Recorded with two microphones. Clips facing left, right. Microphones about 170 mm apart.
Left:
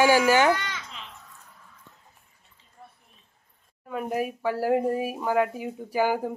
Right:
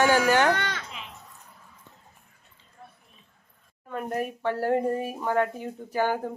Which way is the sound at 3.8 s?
5° left (ahead or behind).